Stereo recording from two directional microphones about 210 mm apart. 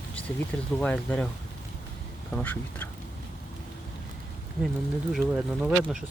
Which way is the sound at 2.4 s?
5° left (ahead or behind).